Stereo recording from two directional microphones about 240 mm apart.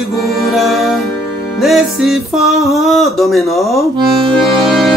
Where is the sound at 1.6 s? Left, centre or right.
Centre.